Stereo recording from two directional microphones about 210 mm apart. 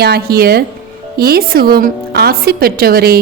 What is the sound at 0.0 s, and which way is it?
A woman's voice, 50° right (ahead or behind).